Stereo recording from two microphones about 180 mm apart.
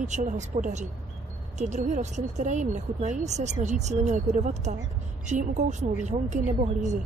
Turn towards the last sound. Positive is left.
turn(degrees=-40)  # may be behind; listen again after turning